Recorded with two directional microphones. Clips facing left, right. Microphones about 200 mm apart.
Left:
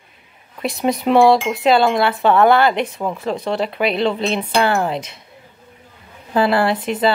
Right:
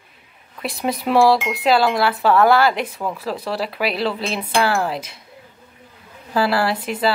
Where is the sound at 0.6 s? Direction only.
Centre (ahead or behind).